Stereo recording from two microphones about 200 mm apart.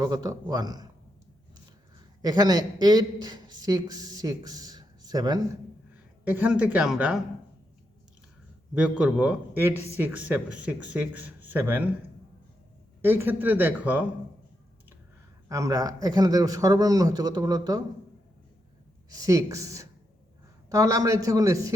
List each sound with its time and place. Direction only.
0.0 s a man's voice: 20° right (ahead or behind)
2.2 s a man's voice: 20° right (ahead or behind)
6.2 s speech: 10° right (ahead or behind)
8.7 s a man's voice: 5° right (ahead or behind)
13.0 s speech: 10° right (ahead or behind)
15.4 s a man's voice: 15° right (ahead or behind)
19.1 s speech: 15° right (ahead or behind)